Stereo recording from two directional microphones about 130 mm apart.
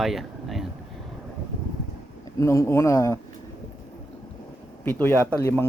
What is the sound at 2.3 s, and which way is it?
Speech, 20° left (ahead or behind).